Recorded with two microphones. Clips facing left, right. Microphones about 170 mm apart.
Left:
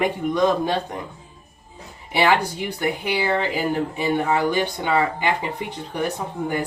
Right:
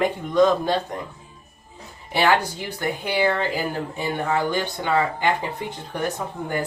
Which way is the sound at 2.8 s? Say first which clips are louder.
Right 2 dB; 15° left (ahead or behind).